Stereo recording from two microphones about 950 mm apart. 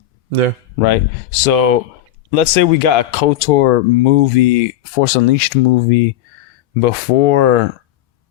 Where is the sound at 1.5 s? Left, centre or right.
Left.